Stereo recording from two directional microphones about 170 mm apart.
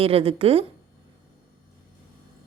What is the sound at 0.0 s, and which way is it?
Speech, 35° right (ahead or behind).